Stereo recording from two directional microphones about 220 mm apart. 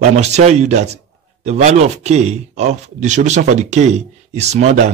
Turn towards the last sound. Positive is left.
turn(degrees=-30)  # may be behind; listen again after turning